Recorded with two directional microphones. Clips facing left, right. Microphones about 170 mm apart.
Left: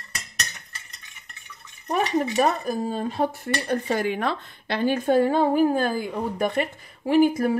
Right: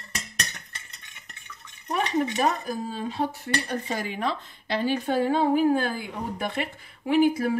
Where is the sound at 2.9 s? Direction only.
50° left (ahead or behind).